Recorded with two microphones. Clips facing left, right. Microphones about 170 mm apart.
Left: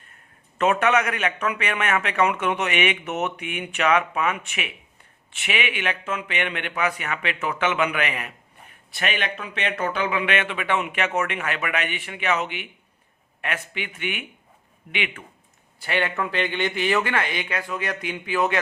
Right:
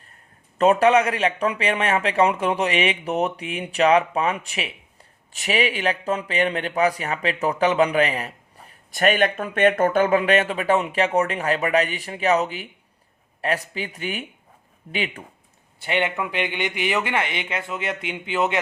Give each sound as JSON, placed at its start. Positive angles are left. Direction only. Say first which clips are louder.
{"t": 0.6, "sound": "a man's voice", "louder": "right 4 dB", "side_deg": -35}
{"t": 15.8, "sound": "a man's voice", "louder": "right 1 dB", "side_deg": -20}